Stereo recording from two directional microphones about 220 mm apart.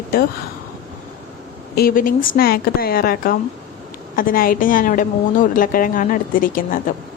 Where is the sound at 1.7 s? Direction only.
40° left (ahead or behind).